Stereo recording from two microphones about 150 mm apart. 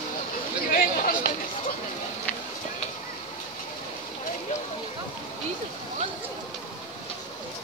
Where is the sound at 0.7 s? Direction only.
70° left (ahead or behind).